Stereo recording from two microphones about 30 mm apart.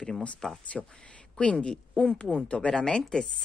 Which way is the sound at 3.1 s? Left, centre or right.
Left.